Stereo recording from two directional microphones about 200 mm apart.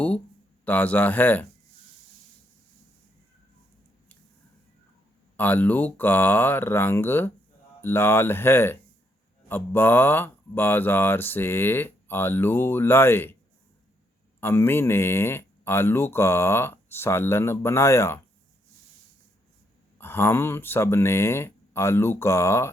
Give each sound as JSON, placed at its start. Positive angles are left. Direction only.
{"t": 0.6, "sound": "speech", "side_deg": 10}
{"t": 5.4, "sound": "speech", "side_deg": 10}
{"t": 14.4, "sound": "speech", "side_deg": 10}
{"t": 20.0, "sound": "speech", "side_deg": 10}